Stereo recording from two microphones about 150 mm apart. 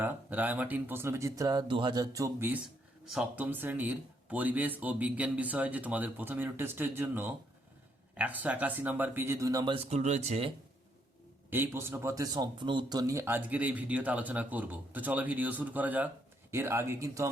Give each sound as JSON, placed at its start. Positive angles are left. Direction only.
{"t": 0.0, "sound": "speech", "side_deg": -10}
{"t": 3.1, "sound": "speech", "side_deg": -10}
{"t": 9.7, "sound": "speech", "side_deg": -50}
{"t": 11.5, "sound": "speech", "side_deg": -15}